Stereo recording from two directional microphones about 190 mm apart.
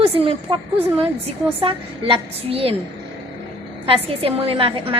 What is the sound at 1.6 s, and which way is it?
A woman's voice, 30° right (ahead or behind).